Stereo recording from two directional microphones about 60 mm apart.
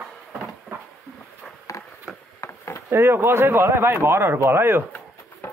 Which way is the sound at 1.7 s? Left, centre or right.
Left.